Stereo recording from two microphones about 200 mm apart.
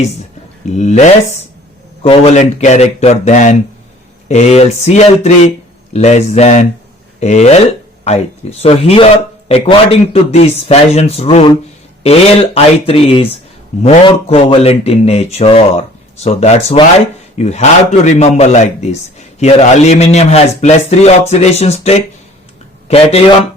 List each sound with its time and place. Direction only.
0.8 s speech: 35° left (ahead or behind)